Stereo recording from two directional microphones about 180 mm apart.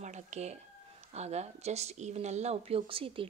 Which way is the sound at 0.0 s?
40° right (ahead or behind).